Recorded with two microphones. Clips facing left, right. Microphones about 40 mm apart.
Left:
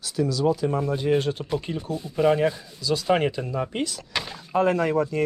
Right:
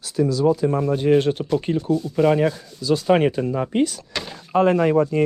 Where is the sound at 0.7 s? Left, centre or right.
Right.